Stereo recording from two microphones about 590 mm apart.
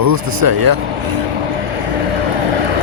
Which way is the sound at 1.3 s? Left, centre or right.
Right.